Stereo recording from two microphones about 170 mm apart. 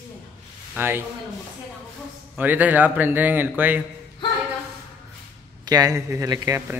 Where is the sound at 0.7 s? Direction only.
15° right (ahead or behind).